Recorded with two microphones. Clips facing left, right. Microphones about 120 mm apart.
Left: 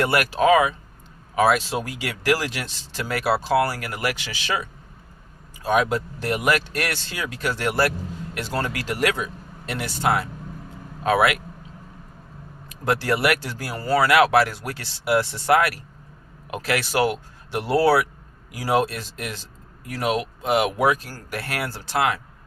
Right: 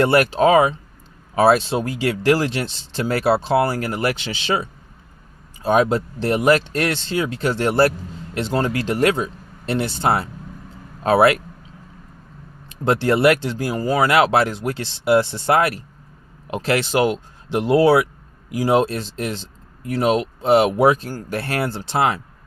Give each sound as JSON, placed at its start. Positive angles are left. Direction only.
{"t": 0.0, "sound": "speech", "side_deg": -30}
{"t": 12.6, "sound": "speech", "side_deg": -25}